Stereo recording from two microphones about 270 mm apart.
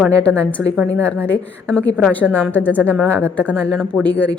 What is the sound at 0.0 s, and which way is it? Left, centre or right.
Speech, centre.